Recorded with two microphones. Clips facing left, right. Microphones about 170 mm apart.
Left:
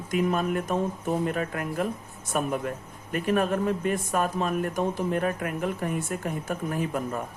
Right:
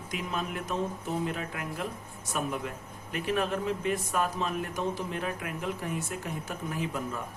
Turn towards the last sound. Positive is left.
turn(degrees=50)  # may be behind; listen again after turning